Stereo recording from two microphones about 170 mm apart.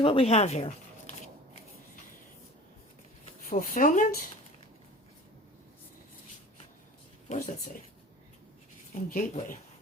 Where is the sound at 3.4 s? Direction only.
55° left (ahead or behind).